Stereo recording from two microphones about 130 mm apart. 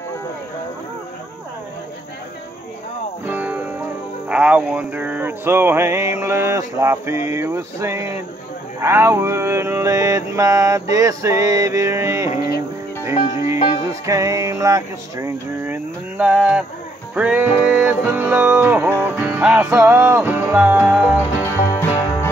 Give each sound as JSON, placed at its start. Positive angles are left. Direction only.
{"t": 3.3, "sound": "music", "side_deg": -15}
{"t": 4.3, "sound": "a sound", "side_deg": -10}
{"t": 13.3, "sound": "music", "side_deg": -25}
{"t": 21.6, "sound": "music", "side_deg": 20}